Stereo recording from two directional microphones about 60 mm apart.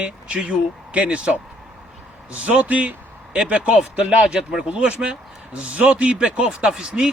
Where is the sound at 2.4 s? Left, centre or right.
Right.